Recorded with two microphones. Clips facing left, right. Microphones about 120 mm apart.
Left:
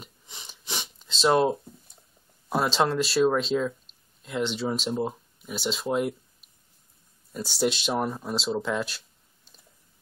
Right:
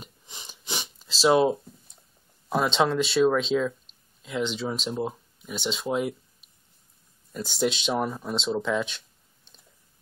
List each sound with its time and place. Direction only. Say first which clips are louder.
0.0 s sniff: right 1 dB; 5° right (ahead or behind)
2.5 s speech: right 1 dB; centre (ahead or behind)